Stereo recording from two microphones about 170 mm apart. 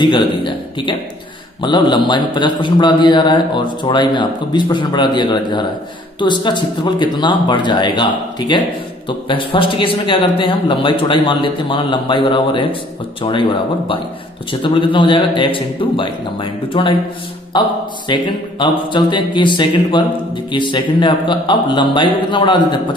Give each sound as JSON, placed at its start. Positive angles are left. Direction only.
{"t": 0.0, "sound": "a man's voice", "side_deg": 30}